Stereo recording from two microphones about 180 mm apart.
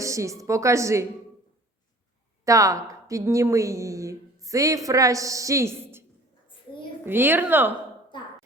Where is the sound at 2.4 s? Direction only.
20° right (ahead or behind).